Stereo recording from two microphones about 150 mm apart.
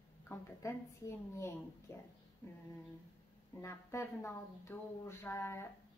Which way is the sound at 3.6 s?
20° left (ahead or behind).